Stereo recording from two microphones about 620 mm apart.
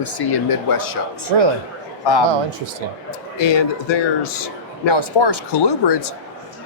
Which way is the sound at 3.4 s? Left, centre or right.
Left.